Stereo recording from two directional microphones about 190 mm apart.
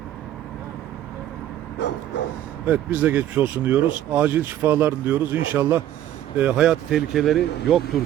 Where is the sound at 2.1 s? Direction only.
65° left (ahead or behind).